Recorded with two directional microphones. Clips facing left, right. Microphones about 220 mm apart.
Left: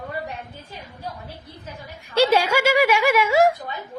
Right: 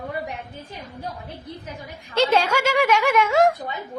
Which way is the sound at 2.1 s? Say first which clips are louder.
Left 2 dB; 10° left (ahead or behind).